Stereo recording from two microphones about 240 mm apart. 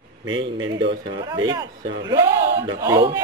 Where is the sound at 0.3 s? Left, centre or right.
Right.